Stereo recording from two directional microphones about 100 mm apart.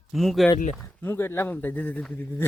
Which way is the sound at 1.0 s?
25° left (ahead or behind).